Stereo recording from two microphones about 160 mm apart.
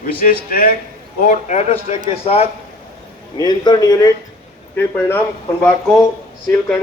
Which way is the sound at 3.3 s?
25° left (ahead or behind).